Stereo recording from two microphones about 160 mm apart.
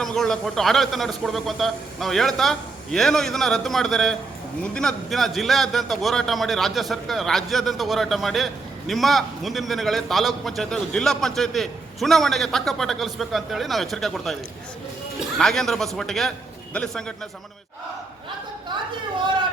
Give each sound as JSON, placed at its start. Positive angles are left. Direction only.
{"t": 0.0, "sound": "a man's voice", "side_deg": 5}
{"t": 15.4, "sound": "a man's voice", "side_deg": 0}
{"t": 19.2, "sound": "a sound", "side_deg": -30}